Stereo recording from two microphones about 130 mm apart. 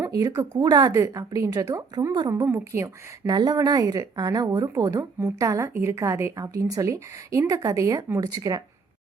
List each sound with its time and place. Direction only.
0.0 s speech: 25° right (ahead or behind)
2.5 s speech: 20° right (ahead or behind)